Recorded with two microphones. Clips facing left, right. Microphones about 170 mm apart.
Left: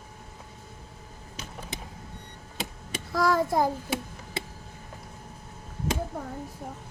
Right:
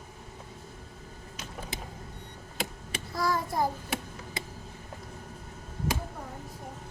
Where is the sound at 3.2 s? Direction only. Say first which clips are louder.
Left 6 dB; 80° left.